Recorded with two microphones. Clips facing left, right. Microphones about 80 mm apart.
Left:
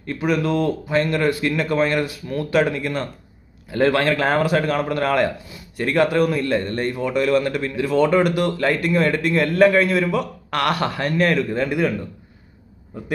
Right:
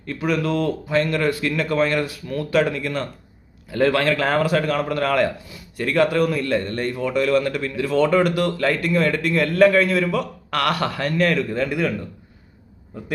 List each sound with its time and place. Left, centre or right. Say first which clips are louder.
0.2 s a man's voice: left 1 dB; centre